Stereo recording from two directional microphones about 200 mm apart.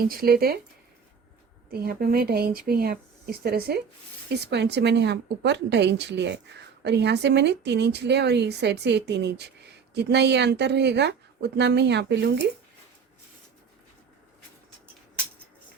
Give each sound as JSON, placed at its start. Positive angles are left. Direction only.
{"t": 0.1, "sound": "speech", "side_deg": -50}
{"t": 1.7, "sound": "speech", "side_deg": -50}